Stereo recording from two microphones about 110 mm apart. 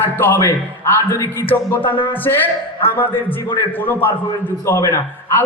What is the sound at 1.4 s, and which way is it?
Speech, 15° left (ahead or behind).